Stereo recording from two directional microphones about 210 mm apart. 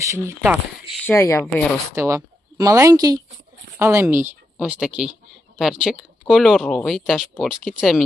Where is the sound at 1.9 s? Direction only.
15° right (ahead or behind).